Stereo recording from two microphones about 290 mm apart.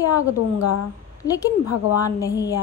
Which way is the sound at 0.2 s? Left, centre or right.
Left.